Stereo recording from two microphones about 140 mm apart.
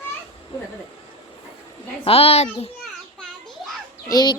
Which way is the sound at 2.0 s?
45° left (ahead or behind).